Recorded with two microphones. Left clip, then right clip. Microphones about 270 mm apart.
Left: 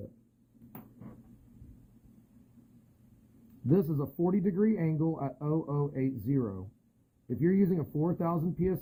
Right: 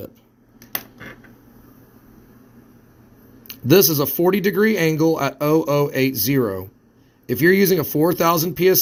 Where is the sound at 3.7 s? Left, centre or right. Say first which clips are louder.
Right 15 dB; right.